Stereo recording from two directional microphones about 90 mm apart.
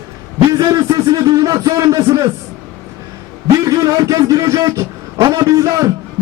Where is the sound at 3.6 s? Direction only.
40° right (ahead or behind).